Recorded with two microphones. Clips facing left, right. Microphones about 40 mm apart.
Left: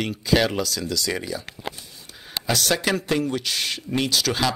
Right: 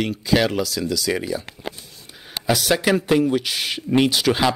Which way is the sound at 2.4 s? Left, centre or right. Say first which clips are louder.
Right 4 dB; centre.